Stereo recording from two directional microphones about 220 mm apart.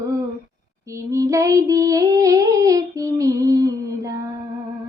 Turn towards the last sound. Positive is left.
turn(degrees=-15)  # may be behind; listen again after turning